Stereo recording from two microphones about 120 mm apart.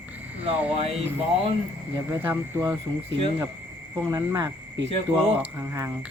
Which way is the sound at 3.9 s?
30° right (ahead or behind).